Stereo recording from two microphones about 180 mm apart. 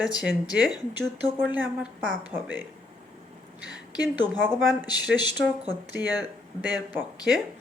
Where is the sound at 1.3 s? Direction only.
10° right (ahead or behind).